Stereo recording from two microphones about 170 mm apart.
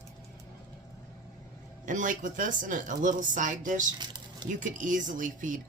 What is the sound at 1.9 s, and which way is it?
Speech, 50° right (ahead or behind).